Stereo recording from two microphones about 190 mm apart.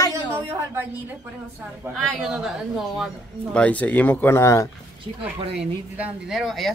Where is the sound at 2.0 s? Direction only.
Centre (ahead or behind); by 4.7 s 15° left (ahead or behind).